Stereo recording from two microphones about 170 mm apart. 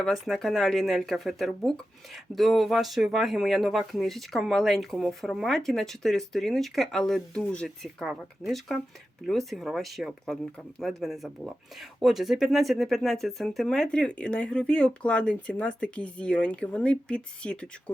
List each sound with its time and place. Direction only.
0.0 s speech: centre (ahead or behind)